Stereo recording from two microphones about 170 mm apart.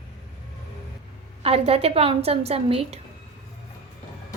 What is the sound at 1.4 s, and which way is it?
A woman's voice, 35° right (ahead or behind).